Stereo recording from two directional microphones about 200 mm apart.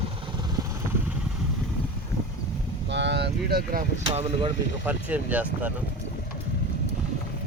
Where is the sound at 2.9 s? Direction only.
60° right (ahead or behind).